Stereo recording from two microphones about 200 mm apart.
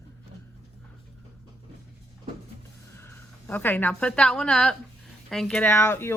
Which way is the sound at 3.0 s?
10° left (ahead or behind).